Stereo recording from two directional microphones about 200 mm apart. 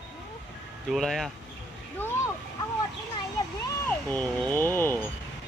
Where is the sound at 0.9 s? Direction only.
Centre (ahead or behind).